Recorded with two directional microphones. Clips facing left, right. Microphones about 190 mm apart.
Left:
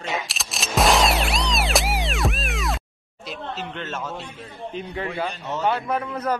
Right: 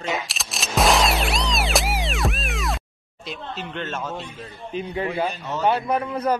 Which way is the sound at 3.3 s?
5° left (ahead or behind).